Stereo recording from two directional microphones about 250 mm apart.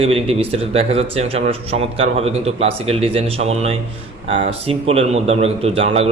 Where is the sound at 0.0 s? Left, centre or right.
Right.